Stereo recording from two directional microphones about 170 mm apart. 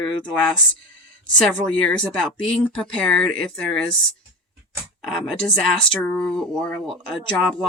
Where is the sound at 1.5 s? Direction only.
5° left (ahead or behind).